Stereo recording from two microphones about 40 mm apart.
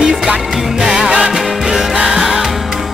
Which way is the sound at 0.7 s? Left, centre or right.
Centre.